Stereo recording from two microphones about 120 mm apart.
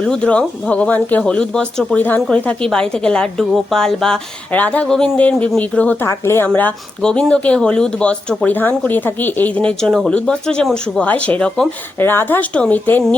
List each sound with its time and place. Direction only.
0.0 s a woman's voice: 10° left (ahead or behind)
11.9 s speech: 15° left (ahead or behind)